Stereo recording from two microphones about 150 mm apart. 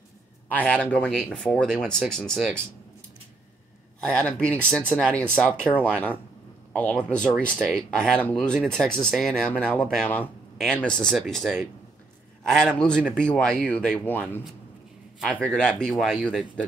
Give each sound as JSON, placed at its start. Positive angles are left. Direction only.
{"t": 0.5, "sound": "speech", "side_deg": 10}
{"t": 4.0, "sound": "speech", "side_deg": 5}